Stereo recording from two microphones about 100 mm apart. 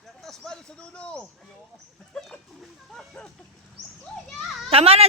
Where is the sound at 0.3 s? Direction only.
10° left (ahead or behind).